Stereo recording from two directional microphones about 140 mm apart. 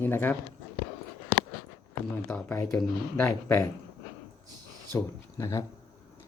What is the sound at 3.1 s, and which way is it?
Speech, 20° left (ahead or behind).